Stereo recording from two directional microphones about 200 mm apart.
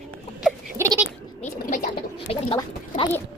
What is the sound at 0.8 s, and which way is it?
Bleat, 15° right (ahead or behind).